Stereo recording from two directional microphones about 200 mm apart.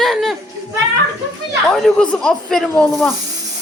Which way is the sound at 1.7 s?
Centre (ahead or behind).